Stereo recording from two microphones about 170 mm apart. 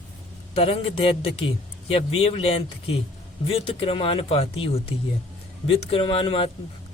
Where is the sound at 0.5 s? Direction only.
35° left (ahead or behind).